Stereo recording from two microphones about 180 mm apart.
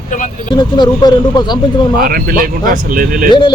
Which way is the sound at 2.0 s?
55° right (ahead or behind).